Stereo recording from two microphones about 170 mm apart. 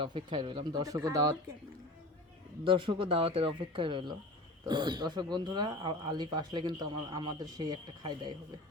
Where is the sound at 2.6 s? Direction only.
30° right (ahead or behind).